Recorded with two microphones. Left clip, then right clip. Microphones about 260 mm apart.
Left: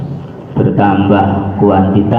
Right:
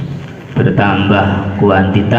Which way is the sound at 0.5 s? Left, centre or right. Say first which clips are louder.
Left 2 dB; right.